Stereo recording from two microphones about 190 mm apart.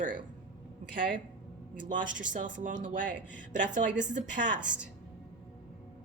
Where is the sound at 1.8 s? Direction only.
45° right (ahead or behind).